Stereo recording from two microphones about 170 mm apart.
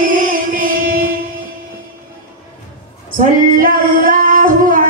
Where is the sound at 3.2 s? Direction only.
50° right (ahead or behind).